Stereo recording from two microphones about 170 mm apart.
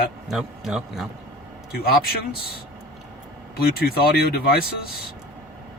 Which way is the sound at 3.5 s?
65° left (ahead or behind).